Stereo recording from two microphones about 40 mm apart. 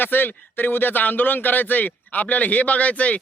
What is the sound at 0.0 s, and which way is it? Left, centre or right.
Speech, left.